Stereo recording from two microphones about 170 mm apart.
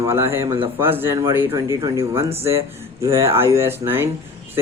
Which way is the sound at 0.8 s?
15° right (ahead or behind).